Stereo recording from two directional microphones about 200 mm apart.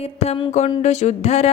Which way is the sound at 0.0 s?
25° left (ahead or behind).